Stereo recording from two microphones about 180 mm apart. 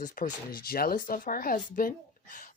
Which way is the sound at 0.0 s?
50° left (ahead or behind).